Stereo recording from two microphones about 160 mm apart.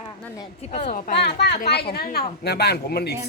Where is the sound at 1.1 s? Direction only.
90° left.